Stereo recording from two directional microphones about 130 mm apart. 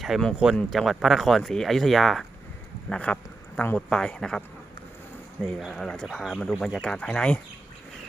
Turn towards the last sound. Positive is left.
turn(degrees=10)  # may be behind; listen again after turning